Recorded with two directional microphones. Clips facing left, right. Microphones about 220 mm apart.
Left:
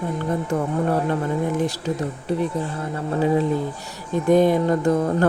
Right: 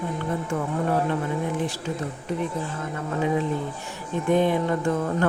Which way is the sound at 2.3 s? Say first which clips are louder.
Left 4 dB; 35° left (ahead or behind).